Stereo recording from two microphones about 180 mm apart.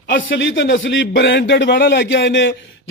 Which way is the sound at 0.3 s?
90° left.